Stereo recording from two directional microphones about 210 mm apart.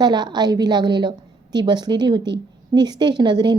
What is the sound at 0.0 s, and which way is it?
A woman's voice, 20° right (ahead or behind).